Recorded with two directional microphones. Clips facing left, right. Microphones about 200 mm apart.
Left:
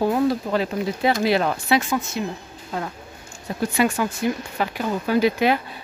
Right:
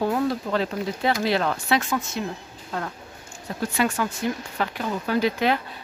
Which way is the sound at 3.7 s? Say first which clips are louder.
Left 3 dB; 15° left (ahead or behind).